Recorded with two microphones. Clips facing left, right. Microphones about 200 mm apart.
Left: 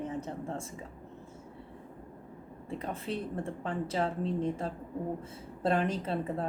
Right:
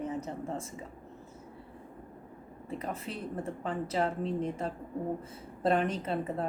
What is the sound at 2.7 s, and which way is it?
Speech, centre (ahead or behind).